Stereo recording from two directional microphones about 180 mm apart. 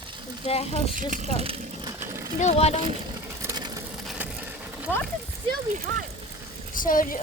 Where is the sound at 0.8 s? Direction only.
45° right (ahead or behind).